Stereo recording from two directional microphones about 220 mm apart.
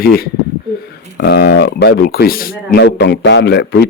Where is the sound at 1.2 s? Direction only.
45° left (ahead or behind).